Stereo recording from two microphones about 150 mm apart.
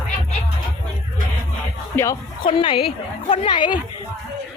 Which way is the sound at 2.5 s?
35° left (ahead or behind).